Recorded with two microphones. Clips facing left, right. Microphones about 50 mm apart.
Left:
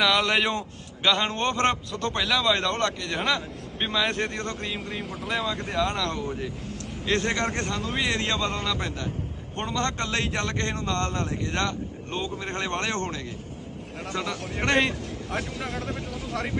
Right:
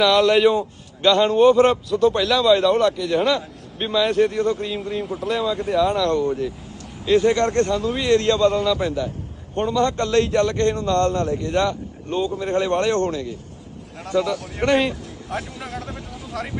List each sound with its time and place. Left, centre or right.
0.0 s a man's voice: centre
7.4 s speech: centre
7.7 s a man's voice: centre
7.9 s a man's voice: centre
8.6 s a man's voice: centre
10.0 s a man's voice: centre
10.4 s a man's voice: centre
14.7 s a man's voice: centre